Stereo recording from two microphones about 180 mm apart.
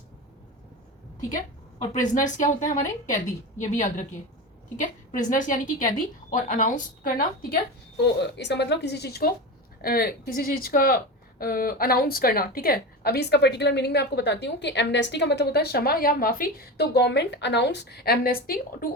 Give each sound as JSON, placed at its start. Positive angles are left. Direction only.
{"t": 1.9, "sound": "a woman's voice", "side_deg": 45}
{"t": 8.0, "sound": "speech", "side_deg": 70}